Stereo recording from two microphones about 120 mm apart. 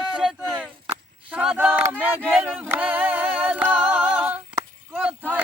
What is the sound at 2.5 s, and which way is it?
A capella, 15° right (ahead or behind).